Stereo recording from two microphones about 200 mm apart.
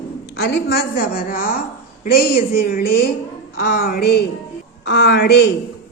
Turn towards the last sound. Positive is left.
turn(degrees=55)  # may be behind; listen again after turning